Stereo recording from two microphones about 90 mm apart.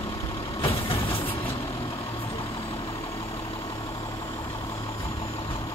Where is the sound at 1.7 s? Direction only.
90° left.